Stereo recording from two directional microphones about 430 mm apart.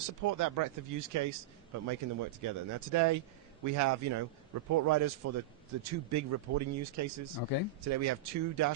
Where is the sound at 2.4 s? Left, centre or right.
Right.